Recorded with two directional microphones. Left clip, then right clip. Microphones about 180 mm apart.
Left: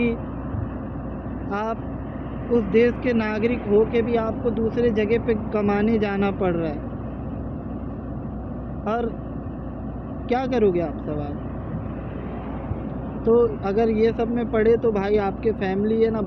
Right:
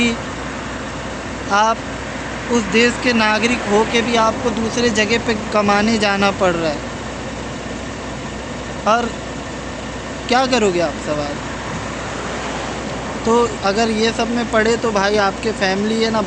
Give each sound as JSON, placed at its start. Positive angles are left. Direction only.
{"t": 1.5, "sound": "speech", "side_deg": -25}
{"t": 8.8, "sound": "speech", "side_deg": -20}
{"t": 10.2, "sound": "speech", "side_deg": -20}
{"t": 13.2, "sound": "speech", "side_deg": -20}